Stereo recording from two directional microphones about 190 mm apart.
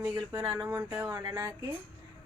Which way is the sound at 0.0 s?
15° right (ahead or behind).